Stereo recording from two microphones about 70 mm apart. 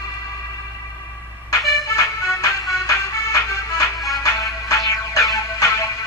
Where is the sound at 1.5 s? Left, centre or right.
Left.